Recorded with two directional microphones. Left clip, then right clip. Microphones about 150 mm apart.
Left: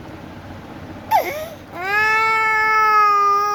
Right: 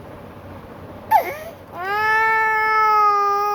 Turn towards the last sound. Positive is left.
turn(degrees=10)  # may be behind; listen again after turning